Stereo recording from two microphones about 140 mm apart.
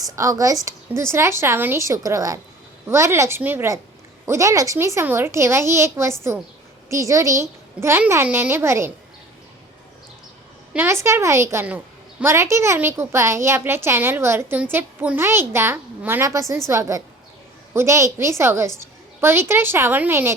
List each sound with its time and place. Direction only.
0.0 s a woman's voice: 25° right (ahead or behind)
10.8 s a woman's voice: 20° right (ahead or behind)